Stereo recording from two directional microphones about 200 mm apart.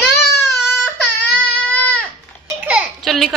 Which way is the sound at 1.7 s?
10° left (ahead or behind).